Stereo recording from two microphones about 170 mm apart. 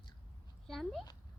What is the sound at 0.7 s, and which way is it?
Speech, centre (ahead or behind).